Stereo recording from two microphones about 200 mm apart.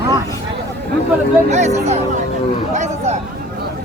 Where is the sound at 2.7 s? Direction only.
35° right (ahead or behind).